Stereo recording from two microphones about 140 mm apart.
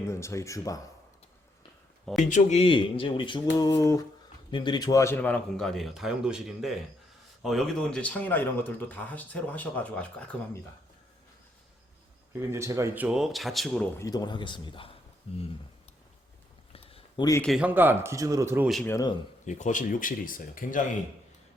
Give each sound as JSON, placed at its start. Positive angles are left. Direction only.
{"t": 0.1, "sound": "speech", "side_deg": 20}
{"t": 2.3, "sound": "speech", "side_deg": 55}
{"t": 2.6, "sound": "a man's voice", "side_deg": 35}
{"t": 12.4, "sound": "speech", "side_deg": -20}
{"t": 13.9, "sound": "speech", "side_deg": 25}
{"t": 16.7, "sound": "a sound", "side_deg": 40}
{"t": 17.6, "sound": "speech", "side_deg": -15}
{"t": 18.9, "sound": "speech", "side_deg": 25}
{"t": 19.5, "sound": "speech", "side_deg": 60}